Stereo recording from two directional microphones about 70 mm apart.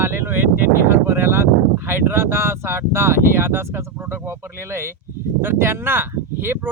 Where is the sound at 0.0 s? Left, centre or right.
Right.